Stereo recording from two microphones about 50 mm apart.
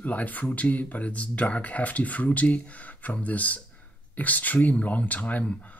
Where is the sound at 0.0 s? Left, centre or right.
Left.